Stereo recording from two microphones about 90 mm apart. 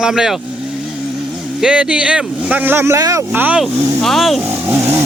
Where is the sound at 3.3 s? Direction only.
20° right (ahead or behind).